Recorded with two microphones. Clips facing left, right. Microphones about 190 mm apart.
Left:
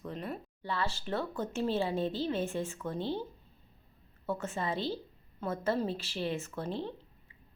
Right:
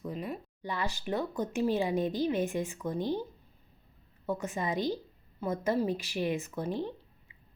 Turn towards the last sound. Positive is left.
turn(degrees=-15)  # may be behind; listen again after turning